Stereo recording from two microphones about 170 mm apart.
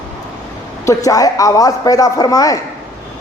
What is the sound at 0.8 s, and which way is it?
A man's voice, 20° left (ahead or behind).